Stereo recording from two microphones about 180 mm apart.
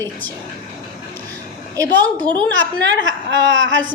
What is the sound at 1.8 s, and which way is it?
Speech, 10° left (ahead or behind).